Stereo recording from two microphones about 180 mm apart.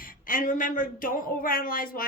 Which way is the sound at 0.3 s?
45° left (ahead or behind).